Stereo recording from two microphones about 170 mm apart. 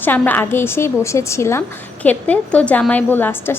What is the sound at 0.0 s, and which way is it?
A woman's voice, 10° left (ahead or behind).